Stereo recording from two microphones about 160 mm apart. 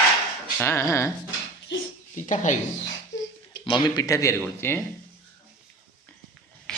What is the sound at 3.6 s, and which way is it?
Speech, 30° left (ahead or behind).